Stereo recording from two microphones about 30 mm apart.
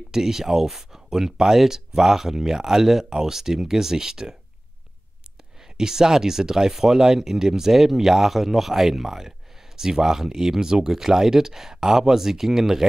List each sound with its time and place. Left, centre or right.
0.1 s speech: centre
5.6 s speech: centre